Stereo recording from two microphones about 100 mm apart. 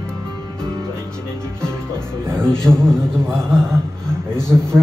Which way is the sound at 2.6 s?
5° left (ahead or behind).